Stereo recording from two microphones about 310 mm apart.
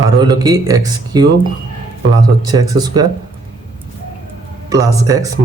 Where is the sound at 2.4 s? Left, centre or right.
Centre.